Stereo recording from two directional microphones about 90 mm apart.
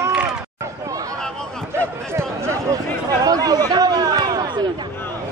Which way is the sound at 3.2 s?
45° right (ahead or behind).